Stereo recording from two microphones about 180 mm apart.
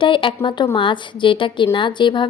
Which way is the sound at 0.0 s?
25° left (ahead or behind).